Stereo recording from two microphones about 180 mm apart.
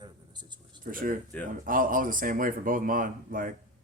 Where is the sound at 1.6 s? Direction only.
50° right (ahead or behind).